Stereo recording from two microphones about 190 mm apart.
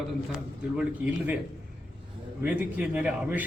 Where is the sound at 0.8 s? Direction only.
5° right (ahead or behind).